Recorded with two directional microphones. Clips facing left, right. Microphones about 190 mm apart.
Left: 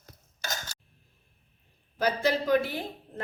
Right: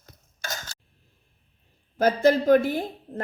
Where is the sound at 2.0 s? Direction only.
45° right (ahead or behind).